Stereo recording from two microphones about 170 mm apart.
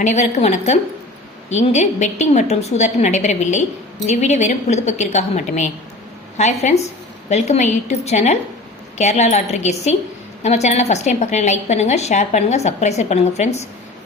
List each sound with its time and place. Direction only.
0.0 s a woman's voice: 40° left (ahead or behind)